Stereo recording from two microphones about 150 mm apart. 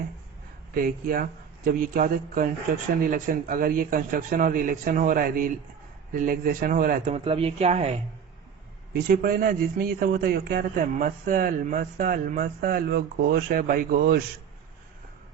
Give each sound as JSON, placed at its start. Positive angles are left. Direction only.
{"t": 0.8, "sound": "a man's voice", "side_deg": -75}
{"t": 7.1, "sound": "speech", "side_deg": -40}
{"t": 8.9, "sound": "a man's voice", "side_deg": -80}